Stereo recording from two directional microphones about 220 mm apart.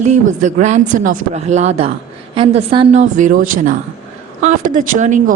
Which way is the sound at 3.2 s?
35° right (ahead or behind).